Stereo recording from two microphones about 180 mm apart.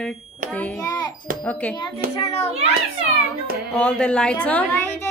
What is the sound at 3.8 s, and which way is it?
A woman's voice, 5° left (ahead or behind).